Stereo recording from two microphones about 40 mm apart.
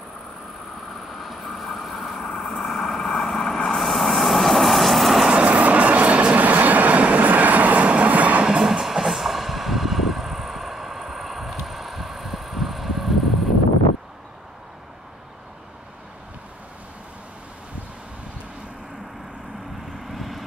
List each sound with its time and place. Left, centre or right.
1.2 s vehicle: centre
5.3 s vehicle: right
8.6 s train: centre
20.1 s vehicle: centre